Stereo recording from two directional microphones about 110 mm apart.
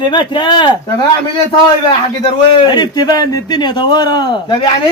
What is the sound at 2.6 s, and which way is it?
A man's voice, 40° left (ahead or behind).